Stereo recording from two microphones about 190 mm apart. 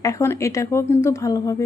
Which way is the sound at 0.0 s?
15° left (ahead or behind).